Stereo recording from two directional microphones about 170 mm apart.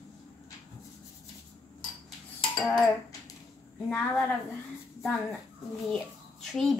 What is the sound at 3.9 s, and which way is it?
Speech, 10° left (ahead or behind).